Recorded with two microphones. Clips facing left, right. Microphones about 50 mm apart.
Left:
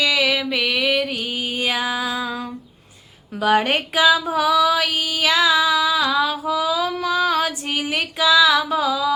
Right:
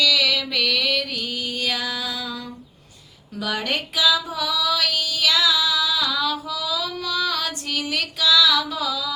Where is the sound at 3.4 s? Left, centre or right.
Left.